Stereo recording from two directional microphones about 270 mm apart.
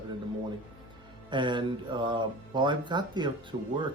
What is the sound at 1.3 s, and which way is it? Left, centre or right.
Speech, centre.